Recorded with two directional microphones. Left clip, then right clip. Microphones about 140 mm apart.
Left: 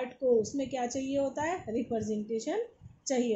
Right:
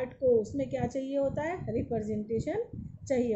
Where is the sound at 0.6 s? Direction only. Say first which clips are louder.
Right 1 dB; 25° left (ahead or behind).